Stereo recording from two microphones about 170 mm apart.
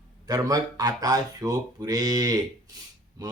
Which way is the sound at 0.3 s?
20° right (ahead or behind).